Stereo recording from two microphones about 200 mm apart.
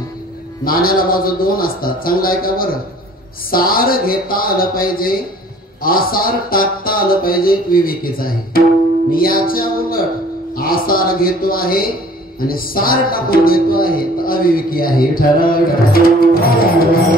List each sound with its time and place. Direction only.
0.7 s music: 45° left (ahead or behind)
10.5 s speech: 45° left (ahead or behind)
12.4 s music: 45° left (ahead or behind)